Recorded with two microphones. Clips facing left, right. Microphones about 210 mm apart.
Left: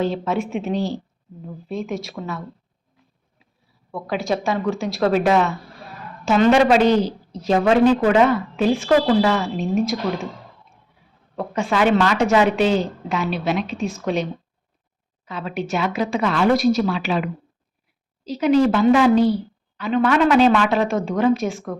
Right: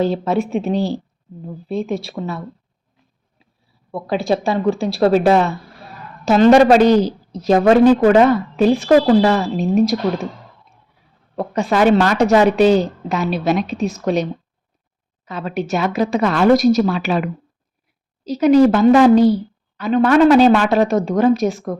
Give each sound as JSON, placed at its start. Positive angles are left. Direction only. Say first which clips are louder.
{"t": 0.0, "sound": "a woman's voice", "louder": "right 4 dB", "side_deg": -35}
{"t": 3.9, "sound": "a woman's voice", "louder": "right 4 dB", "side_deg": -30}
{"t": 11.3, "sound": "a woman's voice", "louder": "right 4 dB", "side_deg": -40}
{"t": 18.3, "sound": "a woman's voice", "louder": "right 5 dB", "side_deg": -45}